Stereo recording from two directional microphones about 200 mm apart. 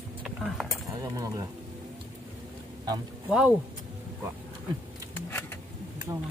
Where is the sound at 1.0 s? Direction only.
15° right (ahead or behind).